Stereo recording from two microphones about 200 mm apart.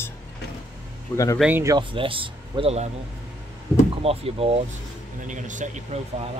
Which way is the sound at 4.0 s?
30° right (ahead or behind).